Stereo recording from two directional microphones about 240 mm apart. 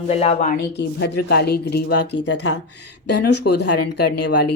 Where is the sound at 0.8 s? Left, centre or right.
Left.